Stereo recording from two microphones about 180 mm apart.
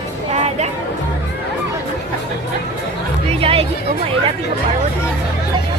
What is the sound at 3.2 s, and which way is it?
Music, 30° right (ahead or behind).